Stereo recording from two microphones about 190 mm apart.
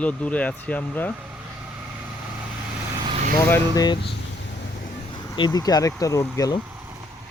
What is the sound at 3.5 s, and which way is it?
Speech, 15° left (ahead or behind).